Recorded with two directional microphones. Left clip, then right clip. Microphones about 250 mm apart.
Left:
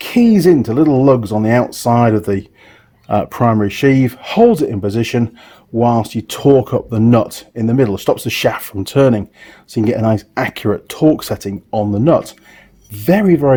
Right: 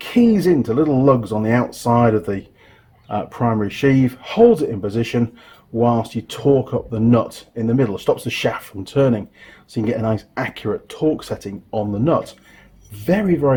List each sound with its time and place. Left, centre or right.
0.0 s speech: left